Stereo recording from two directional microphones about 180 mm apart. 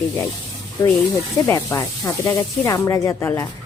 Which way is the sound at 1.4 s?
20° left (ahead or behind).